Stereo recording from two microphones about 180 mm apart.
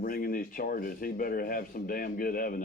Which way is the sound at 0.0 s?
55° left (ahead or behind).